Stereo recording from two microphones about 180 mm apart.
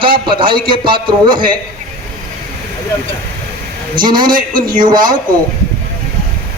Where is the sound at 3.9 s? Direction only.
25° right (ahead or behind).